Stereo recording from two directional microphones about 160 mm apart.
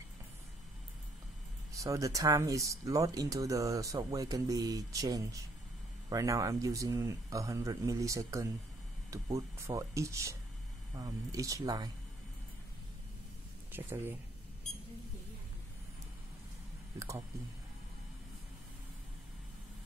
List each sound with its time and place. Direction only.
1.7 s speech: 20° right (ahead or behind)
13.7 s speech: 15° right (ahead or behind)